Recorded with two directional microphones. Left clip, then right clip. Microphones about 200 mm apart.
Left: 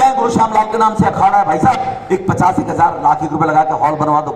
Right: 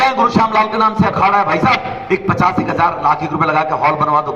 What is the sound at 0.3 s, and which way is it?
A man's voice, 45° left (ahead or behind).